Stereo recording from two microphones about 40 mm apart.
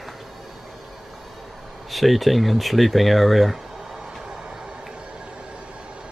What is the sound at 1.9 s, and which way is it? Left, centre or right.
Speech, centre.